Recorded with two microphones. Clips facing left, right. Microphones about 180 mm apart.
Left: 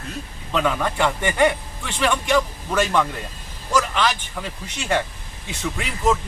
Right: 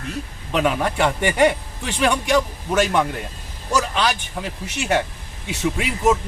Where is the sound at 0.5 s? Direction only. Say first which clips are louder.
Right 2 dB; 15° right (ahead or behind).